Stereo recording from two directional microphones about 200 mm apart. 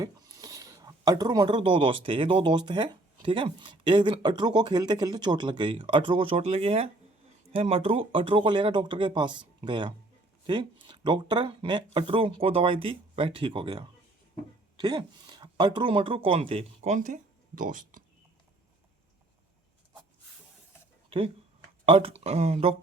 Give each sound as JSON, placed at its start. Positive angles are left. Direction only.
{"t": 0.0, "sound": "speech", "side_deg": -20}
{"t": 21.8, "sound": "speech", "side_deg": -30}